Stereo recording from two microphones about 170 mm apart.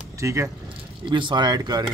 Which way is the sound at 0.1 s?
15° right (ahead or behind).